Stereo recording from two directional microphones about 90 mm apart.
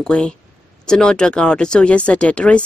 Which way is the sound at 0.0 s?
10° left (ahead or behind).